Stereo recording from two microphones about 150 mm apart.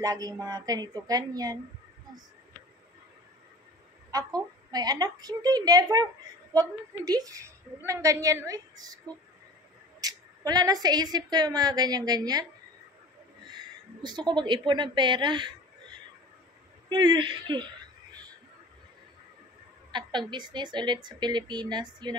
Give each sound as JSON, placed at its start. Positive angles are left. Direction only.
{"t": 0.0, "sound": "a woman's voice", "side_deg": -25}
{"t": 4.1, "sound": "a woman's voice", "side_deg": -25}
{"t": 14.0, "sound": "a woman's voice", "side_deg": -30}
{"t": 16.9, "sound": "a woman's voice", "side_deg": -30}
{"t": 19.9, "sound": "a woman's voice", "side_deg": -30}